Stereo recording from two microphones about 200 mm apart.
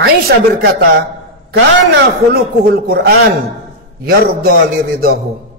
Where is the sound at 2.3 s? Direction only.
50° right (ahead or behind).